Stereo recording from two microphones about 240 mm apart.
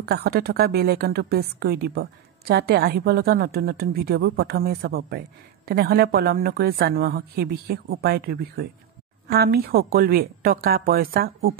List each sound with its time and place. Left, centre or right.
0.0 s a woman's voice: right